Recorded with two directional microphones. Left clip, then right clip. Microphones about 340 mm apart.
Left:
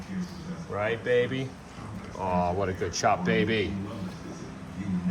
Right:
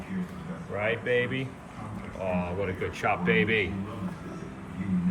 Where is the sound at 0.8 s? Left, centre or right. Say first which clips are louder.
Left 1 dB; left.